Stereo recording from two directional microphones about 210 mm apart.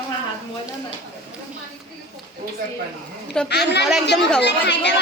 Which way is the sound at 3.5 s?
55° left (ahead or behind).